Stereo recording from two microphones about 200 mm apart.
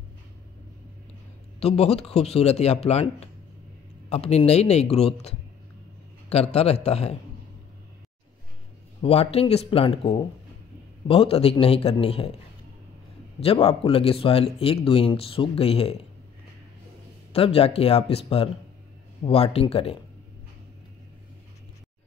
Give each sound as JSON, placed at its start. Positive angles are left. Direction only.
{"t": 1.6, "sound": "speech", "side_deg": 30}
{"t": 9.0, "sound": "speech", "side_deg": 30}
{"t": 13.4, "sound": "speech", "side_deg": 30}
{"t": 17.3, "sound": "speech", "side_deg": 30}